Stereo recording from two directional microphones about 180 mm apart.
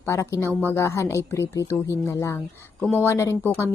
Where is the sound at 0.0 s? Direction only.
15° left (ahead or behind).